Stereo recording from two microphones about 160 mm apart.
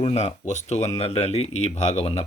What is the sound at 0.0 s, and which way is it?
Speech, 40° left (ahead or behind).